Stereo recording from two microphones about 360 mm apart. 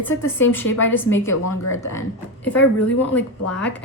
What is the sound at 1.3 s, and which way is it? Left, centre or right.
Speech, left.